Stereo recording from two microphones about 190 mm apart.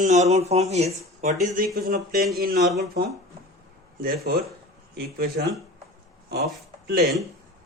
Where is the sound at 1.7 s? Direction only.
55° right (ahead or behind).